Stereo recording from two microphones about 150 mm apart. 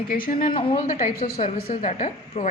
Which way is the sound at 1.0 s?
70° left (ahead or behind).